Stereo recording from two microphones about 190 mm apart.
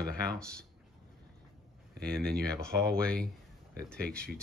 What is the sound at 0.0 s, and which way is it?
Speech, 5° left (ahead or behind).